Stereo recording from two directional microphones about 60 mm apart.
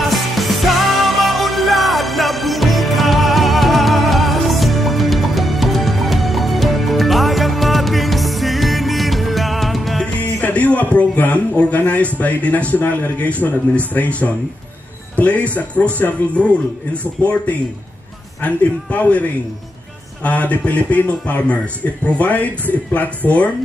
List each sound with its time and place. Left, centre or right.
0.1 s music: centre
10.4 s a sound: left
12.2 s speech: left
16.9 s speech: left
20.2 s speech: left